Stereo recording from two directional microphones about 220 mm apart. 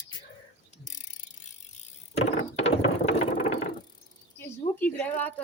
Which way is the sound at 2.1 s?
30° left (ahead or behind).